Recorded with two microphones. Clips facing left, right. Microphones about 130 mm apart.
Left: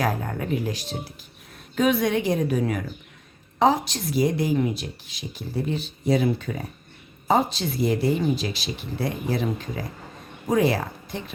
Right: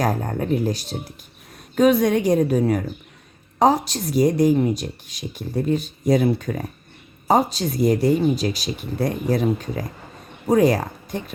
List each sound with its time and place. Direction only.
0.0 s speech: 40° right (ahead or behind)